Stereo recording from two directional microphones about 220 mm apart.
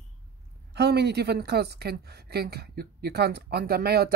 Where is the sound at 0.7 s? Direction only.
50° right (ahead or behind).